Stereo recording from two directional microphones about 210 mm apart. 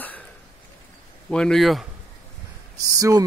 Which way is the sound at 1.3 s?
5° left (ahead or behind).